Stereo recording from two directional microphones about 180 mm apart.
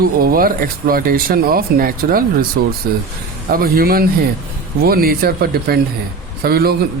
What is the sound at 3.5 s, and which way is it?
Speech, 55° right (ahead or behind).